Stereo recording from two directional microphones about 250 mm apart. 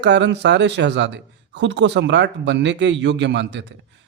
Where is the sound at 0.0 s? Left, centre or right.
Right.